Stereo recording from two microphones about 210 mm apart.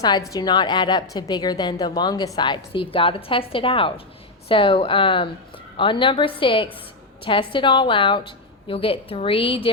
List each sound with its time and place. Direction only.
0.0 s a woman's voice: 15° left (ahead or behind)